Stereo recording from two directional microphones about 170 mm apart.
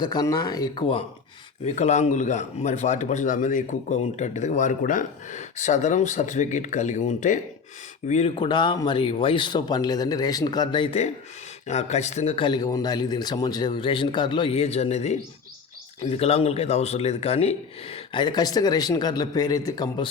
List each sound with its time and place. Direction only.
0.0 s speech: 25° left (ahead or behind)
1.6 s speech: 45° left (ahead or behind)
8.4 s speech: 25° left (ahead or behind)
11.7 s speech: 40° left (ahead or behind); by 20.1 s 25° left (ahead or behind)